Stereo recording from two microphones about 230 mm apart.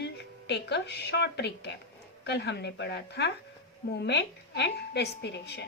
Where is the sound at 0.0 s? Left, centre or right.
Left.